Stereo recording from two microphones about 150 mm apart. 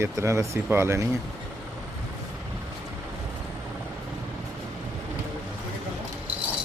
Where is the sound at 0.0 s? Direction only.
20° right (ahead or behind).